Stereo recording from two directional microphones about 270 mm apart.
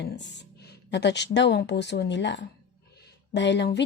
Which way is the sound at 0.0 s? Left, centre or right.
Left.